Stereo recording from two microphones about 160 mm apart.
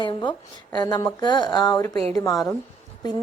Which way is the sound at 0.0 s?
30° left (ahead or behind).